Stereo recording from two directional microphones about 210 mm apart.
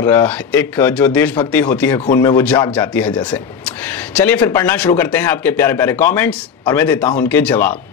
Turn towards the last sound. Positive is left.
turn(degrees=10)  # may be behind; listen again after turning